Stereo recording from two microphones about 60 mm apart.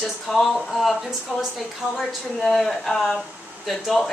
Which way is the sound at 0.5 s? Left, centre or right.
Centre.